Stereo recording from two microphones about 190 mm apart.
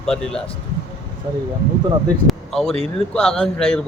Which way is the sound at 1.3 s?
25° right (ahead or behind).